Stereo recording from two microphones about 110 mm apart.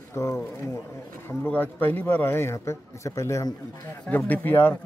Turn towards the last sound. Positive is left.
turn(degrees=15)  # may be behind; listen again after turning